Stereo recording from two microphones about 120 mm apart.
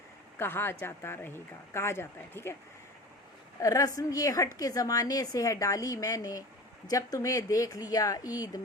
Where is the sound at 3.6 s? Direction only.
25° left (ahead or behind).